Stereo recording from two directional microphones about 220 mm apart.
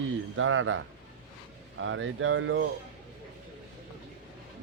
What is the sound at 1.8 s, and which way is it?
Speech, 60° right (ahead or behind).